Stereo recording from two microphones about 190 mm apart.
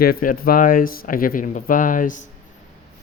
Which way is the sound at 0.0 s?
50° left (ahead or behind).